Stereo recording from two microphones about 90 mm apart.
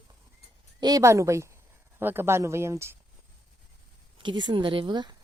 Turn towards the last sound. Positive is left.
turn(degrees=-55)  # may be behind; listen again after turning